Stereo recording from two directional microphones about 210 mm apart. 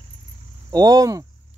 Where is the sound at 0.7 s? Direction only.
15° right (ahead or behind).